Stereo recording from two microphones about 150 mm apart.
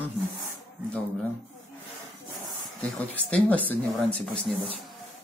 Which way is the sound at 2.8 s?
5° left (ahead or behind).